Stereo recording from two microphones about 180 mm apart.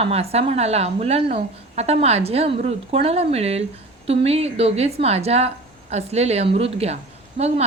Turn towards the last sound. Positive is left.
turn(degrees=-35)  # may be behind; listen again after turning